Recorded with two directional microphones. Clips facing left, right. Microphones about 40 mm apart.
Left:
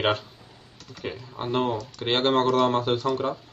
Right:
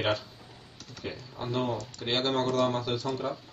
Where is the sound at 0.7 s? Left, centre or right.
Centre.